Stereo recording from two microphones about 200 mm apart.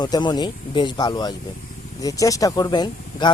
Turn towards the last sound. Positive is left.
turn(degrees=20)  # may be behind; listen again after turning